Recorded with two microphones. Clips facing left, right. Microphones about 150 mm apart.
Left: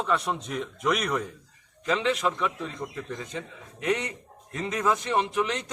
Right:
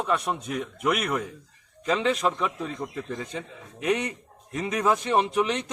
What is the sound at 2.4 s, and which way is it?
A man's voice, 10° right (ahead or behind).